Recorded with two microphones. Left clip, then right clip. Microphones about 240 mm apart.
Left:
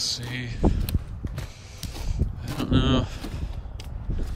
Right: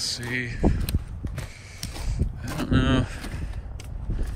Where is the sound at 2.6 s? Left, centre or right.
Centre.